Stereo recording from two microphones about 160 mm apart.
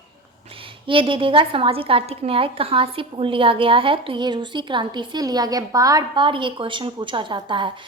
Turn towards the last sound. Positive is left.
turn(degrees=-30)  # may be behind; listen again after turning